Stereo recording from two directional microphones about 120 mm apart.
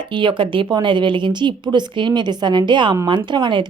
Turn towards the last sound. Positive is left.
turn(degrees=-40)  # may be behind; listen again after turning